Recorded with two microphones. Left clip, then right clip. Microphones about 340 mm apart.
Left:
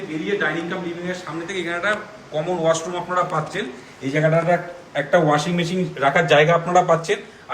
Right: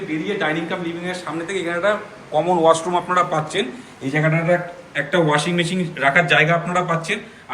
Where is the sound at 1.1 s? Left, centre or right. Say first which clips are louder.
Right 2 dB; centre.